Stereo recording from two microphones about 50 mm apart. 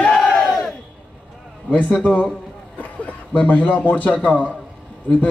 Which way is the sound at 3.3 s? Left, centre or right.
Left.